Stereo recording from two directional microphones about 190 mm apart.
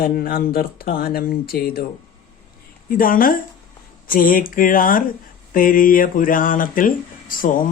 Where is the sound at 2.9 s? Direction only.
45° left (ahead or behind).